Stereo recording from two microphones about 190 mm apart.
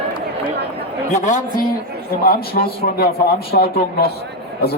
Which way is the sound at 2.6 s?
50° left (ahead or behind).